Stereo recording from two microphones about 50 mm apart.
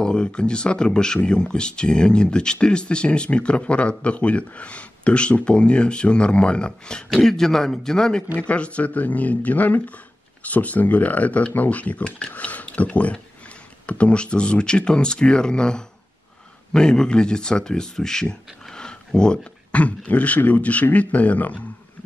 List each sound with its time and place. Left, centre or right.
0.0 s a man's voice: centre